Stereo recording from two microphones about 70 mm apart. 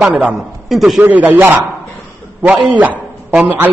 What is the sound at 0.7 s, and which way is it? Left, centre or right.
Speech, centre.